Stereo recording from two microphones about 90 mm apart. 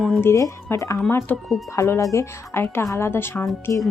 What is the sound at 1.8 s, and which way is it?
A woman's voice, 35° left (ahead or behind).